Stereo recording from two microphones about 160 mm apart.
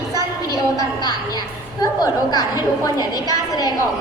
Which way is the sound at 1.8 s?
25° left (ahead or behind).